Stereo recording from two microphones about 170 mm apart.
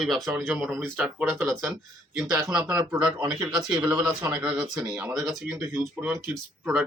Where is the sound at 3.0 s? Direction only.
20° right (ahead or behind).